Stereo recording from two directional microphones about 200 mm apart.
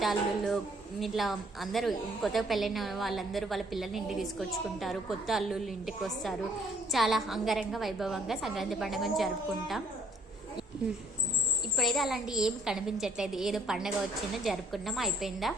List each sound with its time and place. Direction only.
0.0 s a woman's voice: centre (ahead or behind)
11.8 s a woman's voice: centre (ahead or behind)